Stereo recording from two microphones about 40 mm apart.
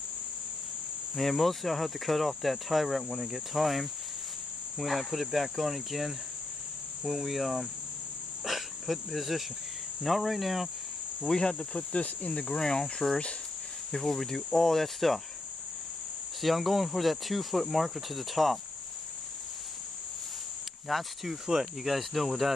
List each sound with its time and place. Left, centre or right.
1.1 s cricket: centre
11.2 s speech: centre
11.9 s cricket: left
12.3 s speech: centre
13.1 s speech: left
13.9 s speech: centre
16.3 s cricket: centre
20.9 s cricket: centre